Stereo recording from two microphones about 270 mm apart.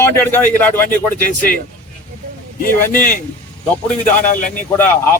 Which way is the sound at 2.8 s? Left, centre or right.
Centre.